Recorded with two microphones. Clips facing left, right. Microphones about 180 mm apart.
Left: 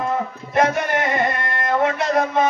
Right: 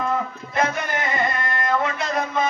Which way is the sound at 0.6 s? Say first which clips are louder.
Left 5 dB; 60° left (ahead or behind).